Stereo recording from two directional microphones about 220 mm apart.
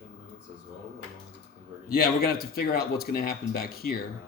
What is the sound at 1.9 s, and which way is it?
Speech, 45° left (ahead or behind).